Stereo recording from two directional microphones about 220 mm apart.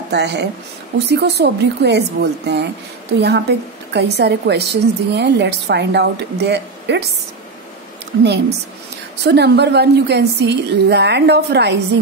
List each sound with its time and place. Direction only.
0.1 s a woman's voice: 50° right (ahead or behind)
8.2 s a woman's voice: 50° right (ahead or behind)